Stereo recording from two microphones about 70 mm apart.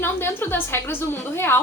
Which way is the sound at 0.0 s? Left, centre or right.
Left.